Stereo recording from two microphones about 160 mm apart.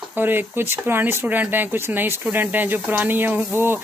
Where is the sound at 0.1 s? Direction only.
10° right (ahead or behind).